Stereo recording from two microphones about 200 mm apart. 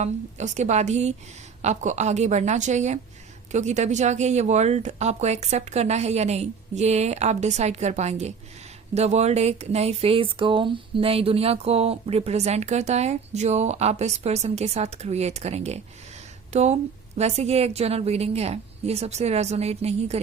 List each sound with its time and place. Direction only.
0.0 s speech: 35° right (ahead or behind)